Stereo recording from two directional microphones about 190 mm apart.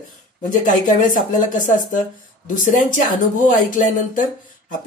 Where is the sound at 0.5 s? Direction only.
45° left (ahead or behind).